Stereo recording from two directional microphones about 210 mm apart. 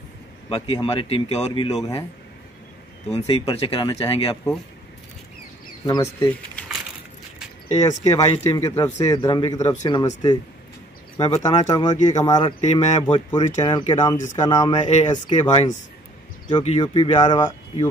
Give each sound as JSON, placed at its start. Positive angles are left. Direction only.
{"t": 0.5, "sound": "speech", "side_deg": 20}
{"t": 3.1, "sound": "speech", "side_deg": 25}
{"t": 5.9, "sound": "speech", "side_deg": 15}
{"t": 7.6, "sound": "speech", "side_deg": 35}
{"t": 8.1, "sound": "speech", "side_deg": 15}
{"t": 11.1, "sound": "speech", "side_deg": 25}